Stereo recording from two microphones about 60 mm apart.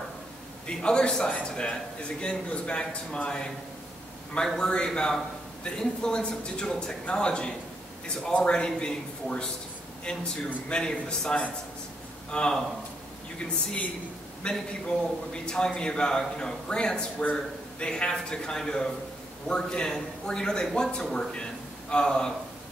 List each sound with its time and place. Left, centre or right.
0.7 s a man's voice: centre
4.6 s a man's voice: centre
14.4 s a man's voice: centre